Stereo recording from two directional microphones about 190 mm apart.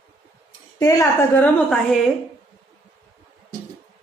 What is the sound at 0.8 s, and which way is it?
A woman's voice, 20° left (ahead or behind).